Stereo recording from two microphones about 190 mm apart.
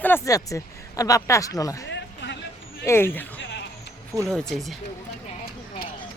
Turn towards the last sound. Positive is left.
turn(degrees=0)  # may be behind; listen again after turning